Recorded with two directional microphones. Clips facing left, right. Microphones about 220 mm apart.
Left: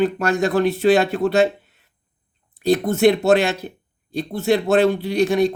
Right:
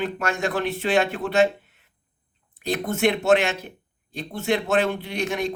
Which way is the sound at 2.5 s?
35° left (ahead or behind).